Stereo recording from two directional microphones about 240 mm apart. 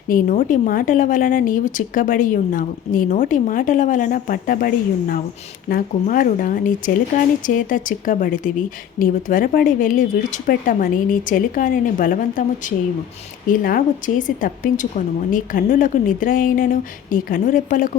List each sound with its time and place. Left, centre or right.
0.1 s a woman's voice: left